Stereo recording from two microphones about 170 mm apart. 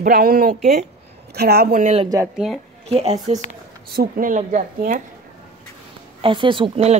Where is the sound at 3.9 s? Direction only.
50° right (ahead or behind).